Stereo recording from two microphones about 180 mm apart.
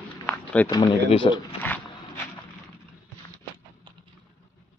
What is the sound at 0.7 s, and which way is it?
Speech, 25° left (ahead or behind).